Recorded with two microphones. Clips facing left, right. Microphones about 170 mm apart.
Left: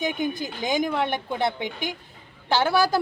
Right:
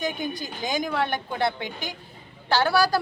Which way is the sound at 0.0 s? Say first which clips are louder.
Left 3 dB; 20° left (ahead or behind).